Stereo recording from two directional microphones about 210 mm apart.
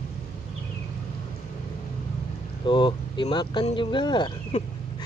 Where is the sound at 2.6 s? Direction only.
20° left (ahead or behind).